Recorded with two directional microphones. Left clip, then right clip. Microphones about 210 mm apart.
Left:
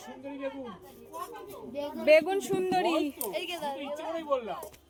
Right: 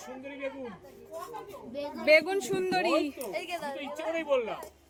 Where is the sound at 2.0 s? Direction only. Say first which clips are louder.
Left 1 dB; 5° left (ahead or behind).